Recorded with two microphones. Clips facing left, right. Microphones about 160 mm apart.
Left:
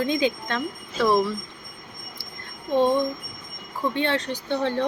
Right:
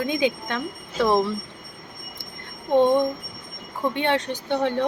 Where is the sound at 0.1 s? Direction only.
15° right (ahead or behind).